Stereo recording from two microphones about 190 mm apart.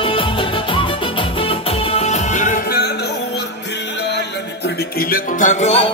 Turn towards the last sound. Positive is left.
turn(degrees=35)  # may be behind; listen again after turning